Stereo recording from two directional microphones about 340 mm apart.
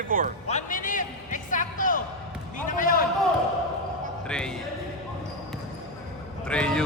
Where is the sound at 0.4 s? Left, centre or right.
Left.